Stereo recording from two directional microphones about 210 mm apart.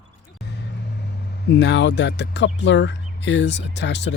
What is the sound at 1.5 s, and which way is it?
Speech, 55° left (ahead or behind).